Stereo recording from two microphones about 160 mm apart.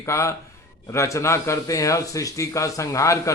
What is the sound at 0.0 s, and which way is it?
A man's voice, 20° left (ahead or behind).